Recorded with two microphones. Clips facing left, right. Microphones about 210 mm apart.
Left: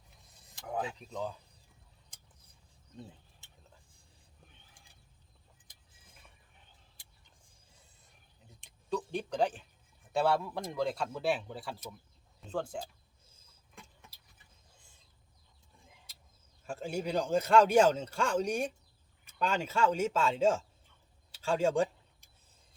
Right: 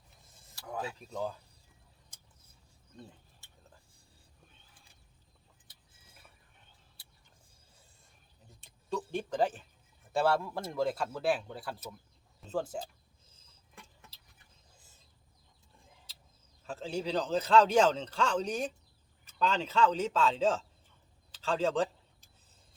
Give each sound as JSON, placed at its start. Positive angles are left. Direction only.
{"t": 0.5, "sound": "vehicle", "side_deg": 20}
{"t": 0.9, "sound": "speech", "side_deg": 0}
{"t": 9.1, "sound": "speech", "side_deg": 0}
{"t": 16.6, "sound": "a man's voice", "side_deg": 10}
{"t": 21.3, "sound": "a sound", "side_deg": 10}